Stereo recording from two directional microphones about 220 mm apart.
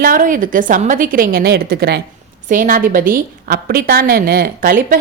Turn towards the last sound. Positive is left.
turn(degrees=-40)  # may be behind; listen again after turning